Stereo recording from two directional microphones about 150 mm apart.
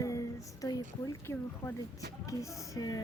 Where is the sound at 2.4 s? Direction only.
25° left (ahead or behind).